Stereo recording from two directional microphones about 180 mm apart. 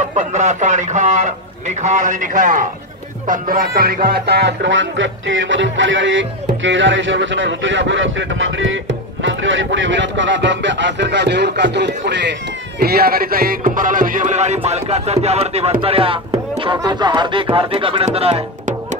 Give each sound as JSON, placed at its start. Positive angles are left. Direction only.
{"t": 0.1, "sound": "a man's voice", "side_deg": -40}
{"t": 3.3, "sound": "music", "side_deg": -50}
{"t": 9.2, "sound": "a man's voice", "side_deg": -90}